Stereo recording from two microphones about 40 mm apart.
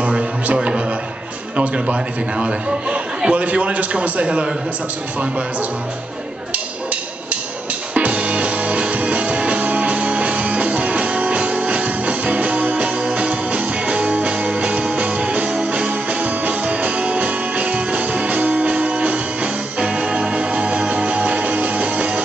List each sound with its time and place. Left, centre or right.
1.6 s a man's voice: right
7.9 s music: right